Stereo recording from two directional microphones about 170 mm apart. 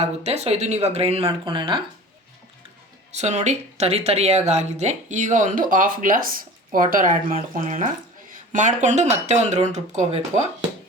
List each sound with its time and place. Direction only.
0.0 s speech: 40° right (ahead or behind)
3.1 s speech: 40° right (ahead or behind)